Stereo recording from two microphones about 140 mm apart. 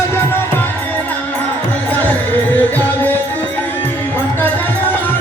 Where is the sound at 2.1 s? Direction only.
10° left (ahead or behind).